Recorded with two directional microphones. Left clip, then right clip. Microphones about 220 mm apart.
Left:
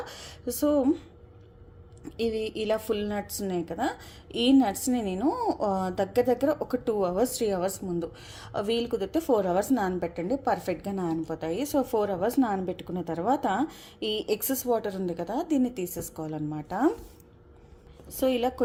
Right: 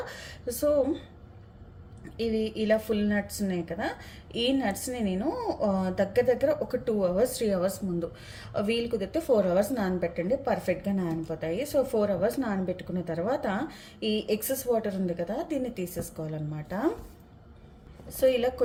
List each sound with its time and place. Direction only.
0.0 s speech: 35° left (ahead or behind)
2.1 s a woman's voice: 35° left (ahead or behind)
18.1 s a woman's voice: 35° left (ahead or behind)